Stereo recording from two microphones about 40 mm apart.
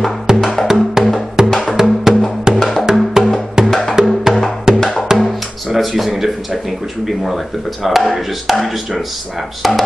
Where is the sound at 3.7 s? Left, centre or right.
Centre.